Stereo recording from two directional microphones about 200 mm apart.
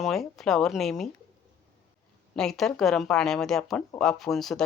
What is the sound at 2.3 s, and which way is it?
Speech, centre (ahead or behind).